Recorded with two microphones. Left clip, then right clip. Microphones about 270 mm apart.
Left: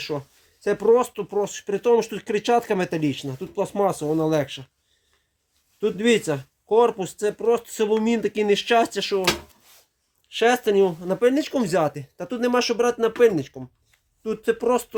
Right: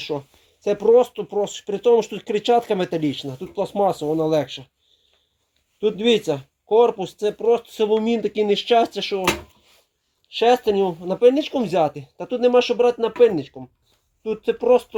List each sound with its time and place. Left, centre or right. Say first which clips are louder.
0.1 s speech: right 3 dB; left
1.3 s speech: right 1 dB; left
5.8 s speech: right 2 dB; left
10.3 s speech: right 2 dB; left